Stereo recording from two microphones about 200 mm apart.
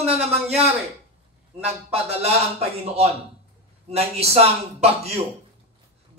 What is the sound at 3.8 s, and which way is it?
Speech, 30° right (ahead or behind).